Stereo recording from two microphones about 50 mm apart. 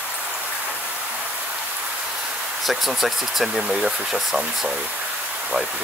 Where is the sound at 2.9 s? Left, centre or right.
Centre.